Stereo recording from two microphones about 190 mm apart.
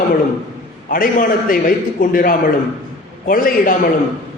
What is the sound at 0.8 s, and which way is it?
A man's voice, 45° left (ahead or behind).